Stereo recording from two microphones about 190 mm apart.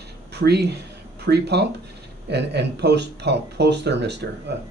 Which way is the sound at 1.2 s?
60° right (ahead or behind).